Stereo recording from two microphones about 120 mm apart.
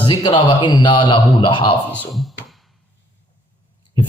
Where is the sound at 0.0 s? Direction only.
40° left (ahead or behind).